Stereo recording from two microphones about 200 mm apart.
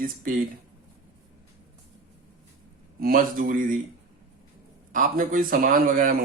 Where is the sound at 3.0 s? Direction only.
45° right (ahead or behind).